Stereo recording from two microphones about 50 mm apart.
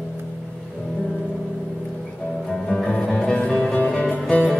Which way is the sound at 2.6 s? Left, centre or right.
Centre.